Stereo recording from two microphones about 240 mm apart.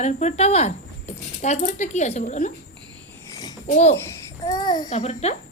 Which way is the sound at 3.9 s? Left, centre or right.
Centre.